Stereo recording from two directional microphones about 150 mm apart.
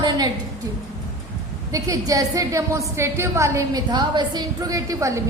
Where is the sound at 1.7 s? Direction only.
20° right (ahead or behind).